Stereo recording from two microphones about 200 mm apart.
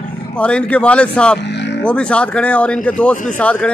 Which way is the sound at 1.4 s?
60° left (ahead or behind).